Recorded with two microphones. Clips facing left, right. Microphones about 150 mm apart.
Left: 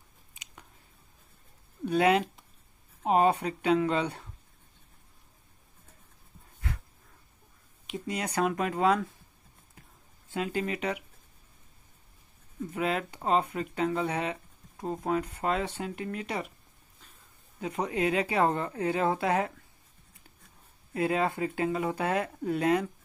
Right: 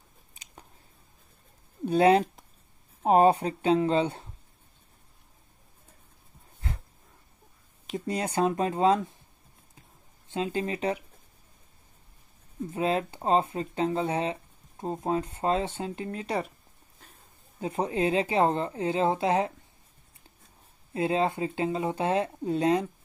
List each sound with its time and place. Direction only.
0.3 s chewing: 35° right (ahead or behind)
1.9 s speech: 30° right (ahead or behind)
7.8 s speech: 35° right (ahead or behind)
10.3 s speech: 25° right (ahead or behind)
12.7 s speech: 30° right (ahead or behind)
17.6 s speech: 30° right (ahead or behind)
20.9 s speech: 25° right (ahead or behind)